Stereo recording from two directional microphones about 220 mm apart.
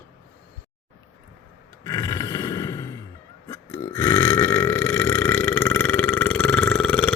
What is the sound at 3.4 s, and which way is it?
Burping, 15° left (ahead or behind).